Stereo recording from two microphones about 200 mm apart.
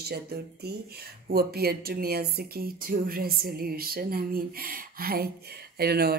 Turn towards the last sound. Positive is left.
turn(degrees=-50)  # may be behind; listen again after turning